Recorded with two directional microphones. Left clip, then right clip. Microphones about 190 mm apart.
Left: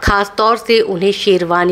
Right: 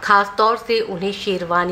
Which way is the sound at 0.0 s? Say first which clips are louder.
Left 2 dB; 35° left (ahead or behind).